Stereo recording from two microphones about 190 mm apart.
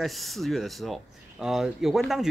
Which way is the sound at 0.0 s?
Centre (ahead or behind).